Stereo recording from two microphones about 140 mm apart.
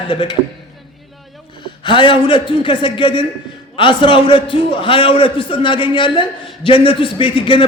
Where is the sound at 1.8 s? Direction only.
35° left (ahead or behind).